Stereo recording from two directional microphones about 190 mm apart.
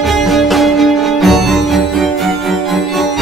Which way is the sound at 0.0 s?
Centre (ahead or behind).